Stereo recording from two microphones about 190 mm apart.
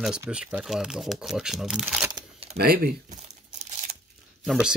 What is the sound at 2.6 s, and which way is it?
Speech, 55° right (ahead or behind).